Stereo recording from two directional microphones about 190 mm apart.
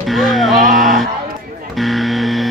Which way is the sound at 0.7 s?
45° right (ahead or behind).